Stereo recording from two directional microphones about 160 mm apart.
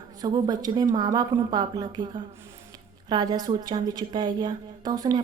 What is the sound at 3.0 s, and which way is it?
A woman's voice, 25° right (ahead or behind).